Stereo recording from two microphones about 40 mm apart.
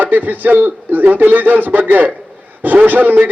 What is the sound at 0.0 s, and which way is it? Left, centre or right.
A man's voice, right.